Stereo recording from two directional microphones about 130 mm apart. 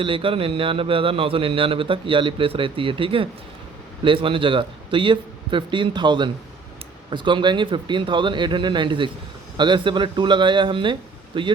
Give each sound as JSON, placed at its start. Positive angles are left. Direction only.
{"t": 0.0, "sound": "a man's voice", "side_deg": -40}